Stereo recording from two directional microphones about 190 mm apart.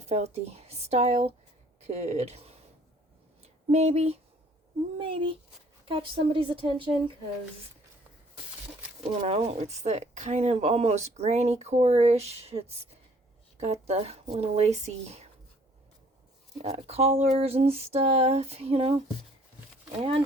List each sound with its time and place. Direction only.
0.0 s speech: 35° right (ahead or behind)
9.2 s speech: 35° right (ahead or behind)
16.6 s speech: 35° right (ahead or behind)
20.0 s speech: 30° right (ahead or behind)